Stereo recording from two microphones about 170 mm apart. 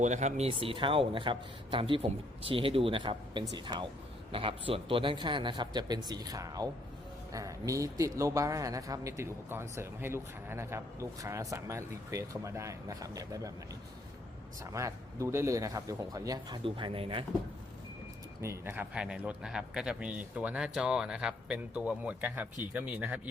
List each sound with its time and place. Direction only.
0.0 s a man's voice: 45° right (ahead or behind); by 13.5 s 20° right (ahead or behind)
14.6 s speech: 20° right (ahead or behind)
18.4 s speech: 15° right (ahead or behind)